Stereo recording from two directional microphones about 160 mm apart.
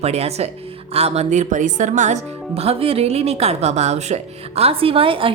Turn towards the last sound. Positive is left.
turn(degrees=-35)  # may be behind; listen again after turning